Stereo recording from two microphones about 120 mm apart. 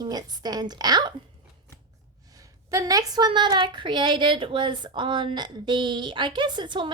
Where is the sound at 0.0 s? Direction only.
35° right (ahead or behind).